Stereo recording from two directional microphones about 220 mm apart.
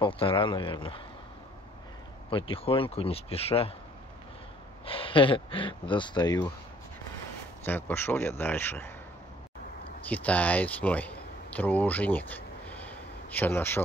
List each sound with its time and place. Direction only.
0.0 s speech: 25° left (ahead or behind)
2.2 s speech: 25° left (ahead or behind)
4.8 s speech: 25° left (ahead or behind)
7.6 s a man's voice: 10° left (ahead or behind)
10.0 s speech: 5° left (ahead or behind)